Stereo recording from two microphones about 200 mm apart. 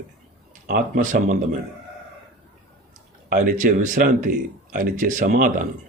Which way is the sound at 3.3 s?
45° right (ahead or behind).